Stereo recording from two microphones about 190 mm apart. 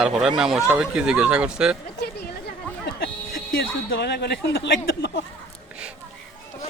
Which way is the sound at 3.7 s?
75° left (ahead or behind).